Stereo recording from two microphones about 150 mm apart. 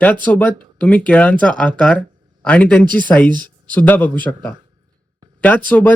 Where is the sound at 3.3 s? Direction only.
30° right (ahead or behind).